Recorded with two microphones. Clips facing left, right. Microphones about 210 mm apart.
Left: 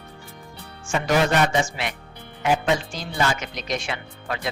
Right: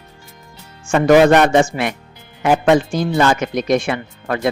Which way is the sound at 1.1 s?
75° right (ahead or behind).